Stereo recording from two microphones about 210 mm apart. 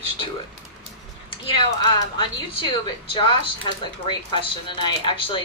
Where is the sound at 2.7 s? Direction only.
25° left (ahead or behind).